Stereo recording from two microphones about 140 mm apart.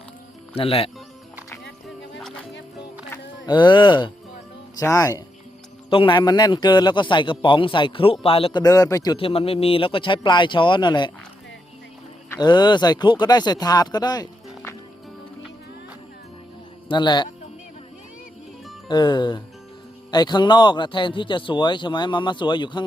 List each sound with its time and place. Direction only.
0.5 s speech: 40° left (ahead or behind)
2.1 s music: 5° left (ahead or behind)
3.4 s speech: 35° left (ahead or behind)
4.8 s speech: 25° left (ahead or behind)
5.9 s speech: 35° left (ahead or behind)
8.6 s speech: 25° left (ahead or behind)
9.1 s speech: 40° left (ahead or behind)
12.4 s speech: 30° left (ahead or behind)
16.9 s speech: 30° left (ahead or behind)
18.9 s speech: 30° left (ahead or behind)